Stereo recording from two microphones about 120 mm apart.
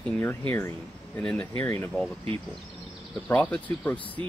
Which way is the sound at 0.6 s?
20° left (ahead or behind).